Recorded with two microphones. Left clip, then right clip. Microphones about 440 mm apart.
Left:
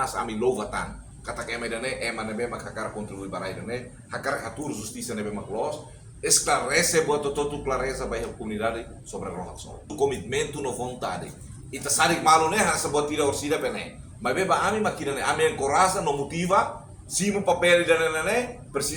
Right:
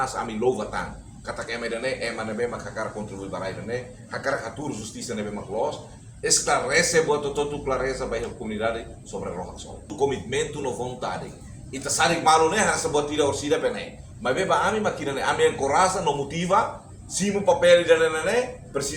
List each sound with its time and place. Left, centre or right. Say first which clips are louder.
0.0 s a man's voice: right 1 dB; left
6.2 s a man's voice: right 1 dB; left
10.1 s a man's voice: right 1 dB; left